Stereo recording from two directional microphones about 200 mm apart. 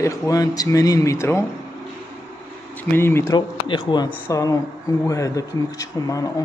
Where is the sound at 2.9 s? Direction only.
10° left (ahead or behind).